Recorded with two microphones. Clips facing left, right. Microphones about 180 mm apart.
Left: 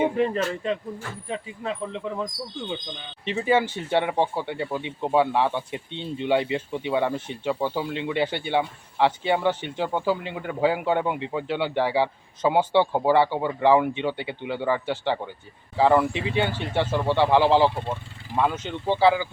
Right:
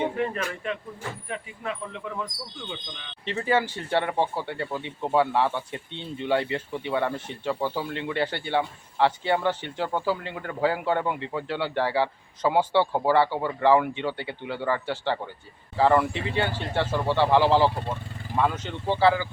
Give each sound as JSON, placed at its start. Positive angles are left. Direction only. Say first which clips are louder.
{"t": 0.2, "sound": "speech", "louder": "left 5 dB", "side_deg": 30}
{"t": 3.2, "sound": "speech", "louder": "left 3 dB", "side_deg": 15}